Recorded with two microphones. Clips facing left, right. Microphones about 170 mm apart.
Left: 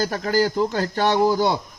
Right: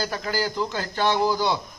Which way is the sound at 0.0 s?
45° left (ahead or behind).